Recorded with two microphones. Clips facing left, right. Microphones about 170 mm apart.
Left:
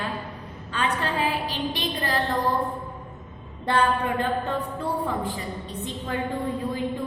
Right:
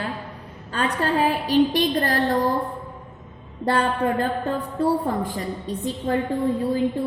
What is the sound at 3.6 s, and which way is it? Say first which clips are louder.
A woman's voice: right 2 dB; 35° right (ahead or behind).